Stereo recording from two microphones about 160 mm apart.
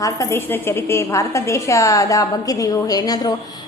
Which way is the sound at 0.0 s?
20° left (ahead or behind).